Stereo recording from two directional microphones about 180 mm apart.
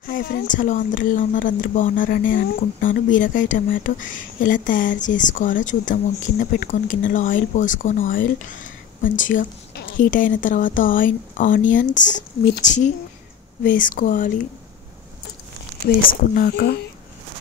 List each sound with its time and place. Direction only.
0.0 s speech: 55° left (ahead or behind)
16.1 s speech: 55° left (ahead or behind)